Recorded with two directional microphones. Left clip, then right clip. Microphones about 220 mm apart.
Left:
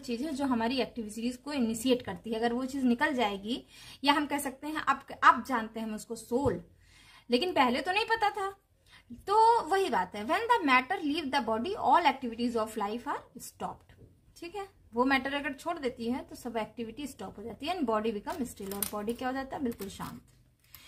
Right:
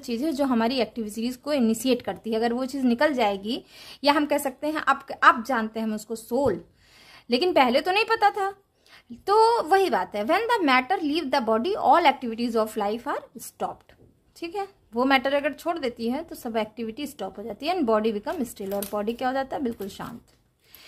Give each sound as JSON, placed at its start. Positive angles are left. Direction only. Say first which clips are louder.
{"t": 0.0, "sound": "a woman's voice", "louder": "right 8 dB", "side_deg": -45}